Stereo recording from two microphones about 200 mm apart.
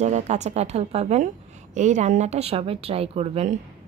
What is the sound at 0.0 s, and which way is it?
A woman's voice, 35° right (ahead or behind).